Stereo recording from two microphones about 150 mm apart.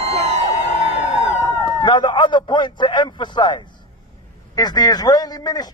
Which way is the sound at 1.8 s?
30° left (ahead or behind).